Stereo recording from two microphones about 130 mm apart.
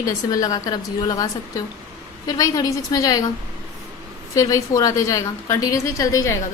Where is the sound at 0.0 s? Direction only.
25° left (ahead or behind).